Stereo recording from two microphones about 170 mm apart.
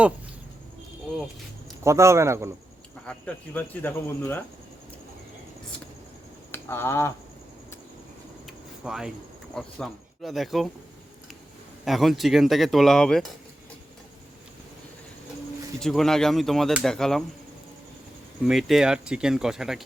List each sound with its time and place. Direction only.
1.8 s a man's voice: 15° right (ahead or behind)
3.1 s speech: 10° left (ahead or behind)
6.5 s a sound: 15° left (ahead or behind)
8.4 s a sound: 5° right (ahead or behind)
9.6 s speech: centre (ahead or behind)
11.9 s speech: centre (ahead or behind)
15.8 s speech: centre (ahead or behind)
18.4 s speech: centre (ahead or behind)